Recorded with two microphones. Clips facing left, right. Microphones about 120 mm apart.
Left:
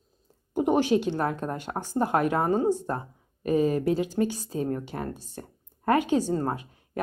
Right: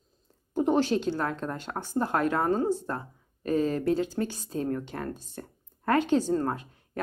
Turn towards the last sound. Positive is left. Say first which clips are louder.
# left 2 dB
turn(degrees=10)  # may be behind; listen again after turning